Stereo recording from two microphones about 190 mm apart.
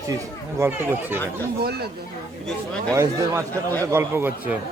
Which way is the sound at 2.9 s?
15° right (ahead or behind).